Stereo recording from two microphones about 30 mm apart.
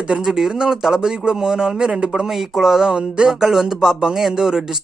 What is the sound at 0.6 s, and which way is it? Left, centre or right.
A man's voice, centre.